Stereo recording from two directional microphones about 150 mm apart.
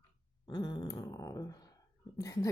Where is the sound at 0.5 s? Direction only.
30° left (ahead or behind).